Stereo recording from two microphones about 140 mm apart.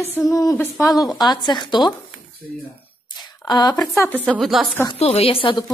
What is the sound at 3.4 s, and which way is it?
Speech, 30° left (ahead or behind).